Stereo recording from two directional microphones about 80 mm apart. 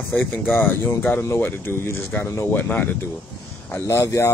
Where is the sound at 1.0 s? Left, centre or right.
Centre.